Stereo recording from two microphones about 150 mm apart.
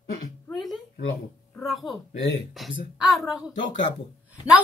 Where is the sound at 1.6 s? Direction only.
Centre (ahead or behind).